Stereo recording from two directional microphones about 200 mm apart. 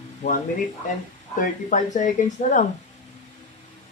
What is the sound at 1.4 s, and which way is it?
A woman's voice, 40° left (ahead or behind).